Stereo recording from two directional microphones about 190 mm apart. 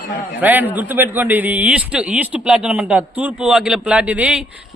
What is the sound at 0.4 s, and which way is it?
A man's voice, 10° right (ahead or behind).